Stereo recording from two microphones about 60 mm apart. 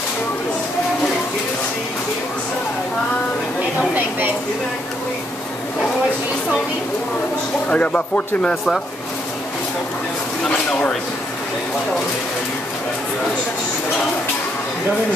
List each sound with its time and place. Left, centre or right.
7.7 s speech: left